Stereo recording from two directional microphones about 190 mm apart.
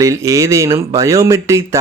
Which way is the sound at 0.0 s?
15° right (ahead or behind).